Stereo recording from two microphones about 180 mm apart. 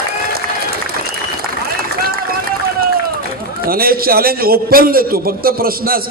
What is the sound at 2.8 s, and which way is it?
Run, 55° right (ahead or behind).